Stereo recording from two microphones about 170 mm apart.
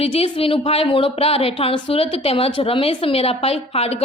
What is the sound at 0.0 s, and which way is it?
Speech, 35° left (ahead or behind).